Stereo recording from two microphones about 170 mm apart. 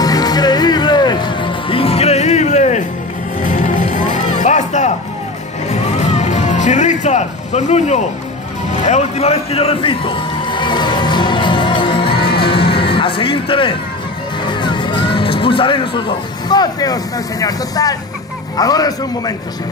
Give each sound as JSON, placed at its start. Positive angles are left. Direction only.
{"t": 0.0, "sound": "music", "side_deg": 25}
{"t": 14.4, "sound": "speech", "side_deg": 25}